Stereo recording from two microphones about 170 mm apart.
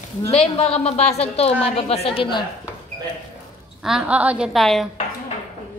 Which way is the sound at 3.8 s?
5° right (ahead or behind).